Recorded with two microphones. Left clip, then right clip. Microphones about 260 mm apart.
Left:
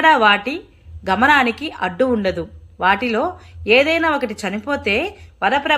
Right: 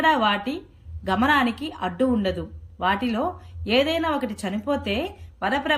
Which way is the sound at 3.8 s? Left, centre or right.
Centre.